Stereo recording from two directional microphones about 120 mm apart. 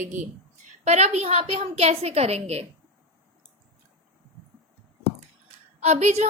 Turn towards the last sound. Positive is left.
turn(degrees=-65)  # may be behind; listen again after turning